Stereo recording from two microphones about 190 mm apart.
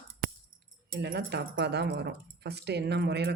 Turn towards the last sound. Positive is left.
turn(degrees=-60)  # may be behind; listen again after turning